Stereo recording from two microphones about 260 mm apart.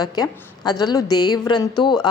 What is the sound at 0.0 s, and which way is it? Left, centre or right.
A woman's voice, centre.